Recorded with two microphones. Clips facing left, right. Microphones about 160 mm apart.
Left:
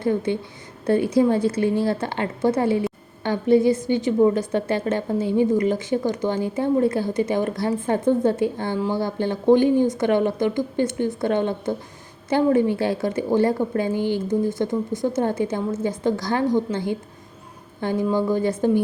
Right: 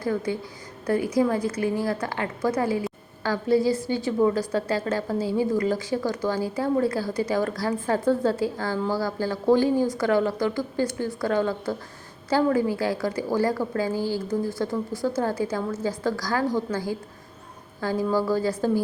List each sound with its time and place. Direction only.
0.0 s a woman's voice: 25° left (ahead or behind)